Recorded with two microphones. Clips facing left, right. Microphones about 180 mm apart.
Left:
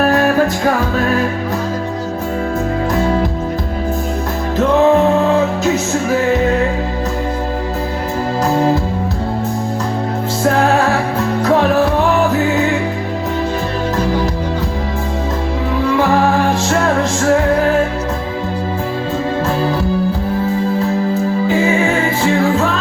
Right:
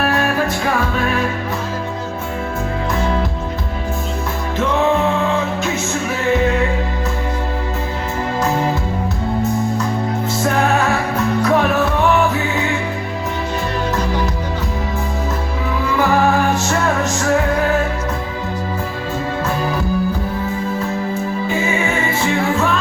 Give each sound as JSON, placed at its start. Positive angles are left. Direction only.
{"t": 0.0, "sound": "music", "side_deg": 40}
{"t": 4.5, "sound": "music", "side_deg": 35}
{"t": 10.4, "sound": "music", "side_deg": 35}
{"t": 16.6, "sound": "music", "side_deg": 30}
{"t": 21.5, "sound": "music", "side_deg": 35}